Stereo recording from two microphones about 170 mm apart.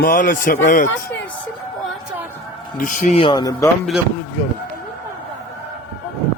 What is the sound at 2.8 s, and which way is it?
Speech, 50° left (ahead or behind).